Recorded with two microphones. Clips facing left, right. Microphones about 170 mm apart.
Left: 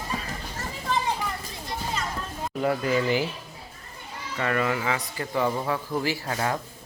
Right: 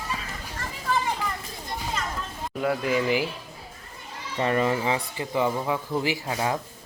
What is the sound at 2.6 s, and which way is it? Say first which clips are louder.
Speech: even; centre (ahead or behind).